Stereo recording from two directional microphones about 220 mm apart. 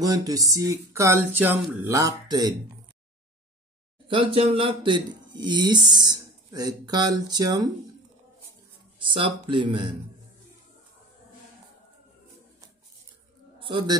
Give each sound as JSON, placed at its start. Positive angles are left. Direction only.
{"t": 0.0, "sound": "speech", "side_deg": -15}
{"t": 4.1, "sound": "speech", "side_deg": -25}
{"t": 9.0, "sound": "speech", "side_deg": -20}
{"t": 13.6, "sound": "a man's voice", "side_deg": -20}